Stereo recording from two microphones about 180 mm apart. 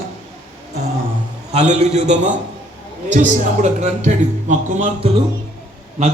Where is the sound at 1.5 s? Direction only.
40° right (ahead or behind).